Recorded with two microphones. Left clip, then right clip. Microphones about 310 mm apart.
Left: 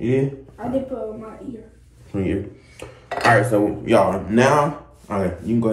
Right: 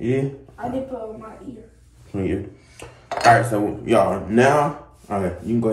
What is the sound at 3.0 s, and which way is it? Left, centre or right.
Dishes, right.